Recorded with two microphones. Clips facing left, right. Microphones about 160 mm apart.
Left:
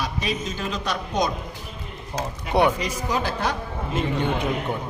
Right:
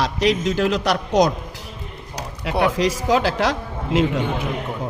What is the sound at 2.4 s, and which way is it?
Speech, 90° right.